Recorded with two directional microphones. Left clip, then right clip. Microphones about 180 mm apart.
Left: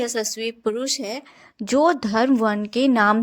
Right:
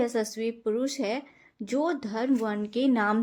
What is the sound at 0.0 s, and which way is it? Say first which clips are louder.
A woman's voice: left 3 dB; 35° left (ahead or behind).